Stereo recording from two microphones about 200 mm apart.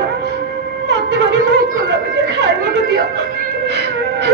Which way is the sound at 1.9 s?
60° right (ahead or behind).